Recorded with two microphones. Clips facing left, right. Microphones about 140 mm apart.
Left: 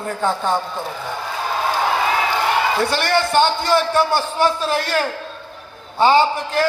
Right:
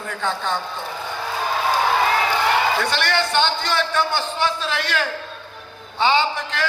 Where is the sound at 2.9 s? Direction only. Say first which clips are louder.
Left 4 dB; 40° left (ahead or behind).